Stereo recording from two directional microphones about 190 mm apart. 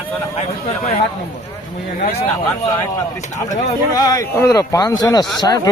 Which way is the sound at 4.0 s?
20° left (ahead or behind).